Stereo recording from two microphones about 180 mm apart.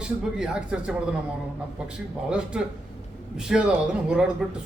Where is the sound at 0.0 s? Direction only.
5° right (ahead or behind).